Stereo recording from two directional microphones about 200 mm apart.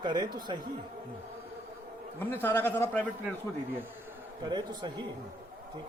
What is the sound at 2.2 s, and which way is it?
A man's voice, 10° left (ahead or behind).